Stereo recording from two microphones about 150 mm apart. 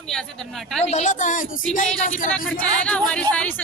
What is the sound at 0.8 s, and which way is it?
Speech, 50° left (ahead or behind).